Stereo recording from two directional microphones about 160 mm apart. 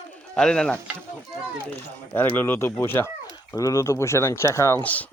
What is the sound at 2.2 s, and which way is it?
Speech, 15° left (ahead or behind).